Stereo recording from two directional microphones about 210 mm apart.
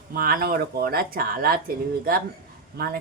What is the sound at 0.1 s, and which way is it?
A woman's voice, 45° right (ahead or behind).